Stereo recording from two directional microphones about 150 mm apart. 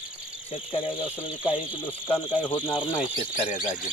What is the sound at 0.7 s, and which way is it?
Speech, 35° left (ahead or behind).